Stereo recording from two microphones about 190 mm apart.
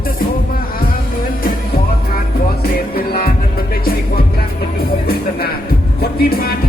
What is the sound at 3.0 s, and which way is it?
Music, 55° left (ahead or behind).